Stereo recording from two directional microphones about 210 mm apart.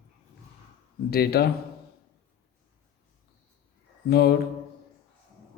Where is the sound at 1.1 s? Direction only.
50° left (ahead or behind).